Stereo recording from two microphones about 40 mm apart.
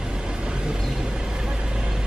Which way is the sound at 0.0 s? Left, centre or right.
Centre.